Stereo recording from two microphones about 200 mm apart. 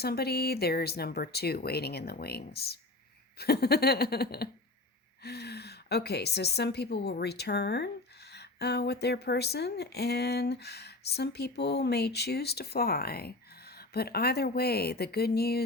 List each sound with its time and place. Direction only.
0.0 s a woman's voice: 50° left (ahead or behind)